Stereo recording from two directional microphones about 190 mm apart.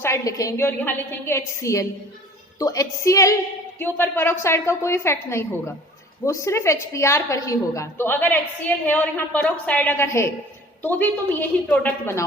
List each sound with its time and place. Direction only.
0.0 s a woman's voice: 15° left (ahead or behind)